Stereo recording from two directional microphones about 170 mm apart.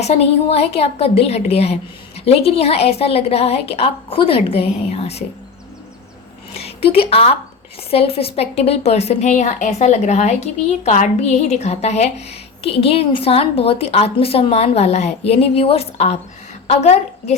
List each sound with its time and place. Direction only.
0.0 s a woman's voice: 40° left (ahead or behind)
6.5 s a woman's voice: 35° left (ahead or behind)